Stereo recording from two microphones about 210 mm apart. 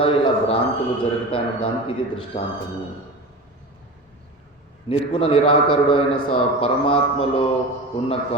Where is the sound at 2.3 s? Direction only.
25° left (ahead or behind).